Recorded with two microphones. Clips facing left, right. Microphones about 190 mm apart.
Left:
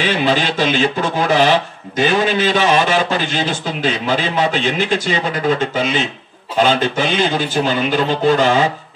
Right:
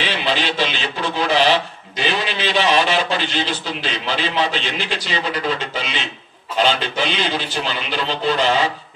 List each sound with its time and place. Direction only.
0.0 s speech: 45° left (ahead or behind)